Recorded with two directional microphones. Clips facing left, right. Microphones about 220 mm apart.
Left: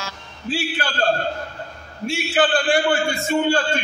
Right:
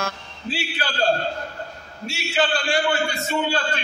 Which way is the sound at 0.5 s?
50° left (ahead or behind).